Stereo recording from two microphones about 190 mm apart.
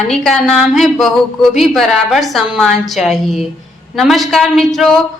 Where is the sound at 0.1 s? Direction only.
Centre (ahead or behind).